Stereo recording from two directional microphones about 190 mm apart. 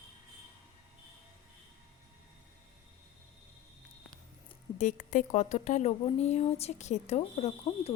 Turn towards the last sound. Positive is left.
turn(degrees=35)  # may be behind; listen again after turning